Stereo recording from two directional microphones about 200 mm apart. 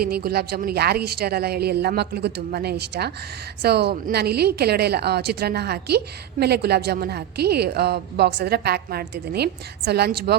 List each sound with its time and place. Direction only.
0.0 s a woman's voice: 50° right (ahead or behind)